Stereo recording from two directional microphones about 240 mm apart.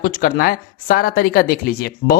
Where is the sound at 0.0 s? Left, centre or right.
Left.